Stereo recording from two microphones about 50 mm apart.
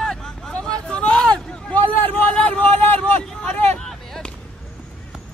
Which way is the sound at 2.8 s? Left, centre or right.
Left.